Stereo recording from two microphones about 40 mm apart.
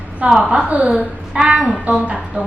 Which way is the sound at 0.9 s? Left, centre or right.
Centre.